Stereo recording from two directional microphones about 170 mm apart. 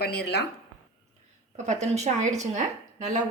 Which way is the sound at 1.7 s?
40° right (ahead or behind).